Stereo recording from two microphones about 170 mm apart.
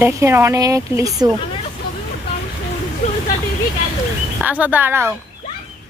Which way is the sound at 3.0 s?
40° left (ahead or behind).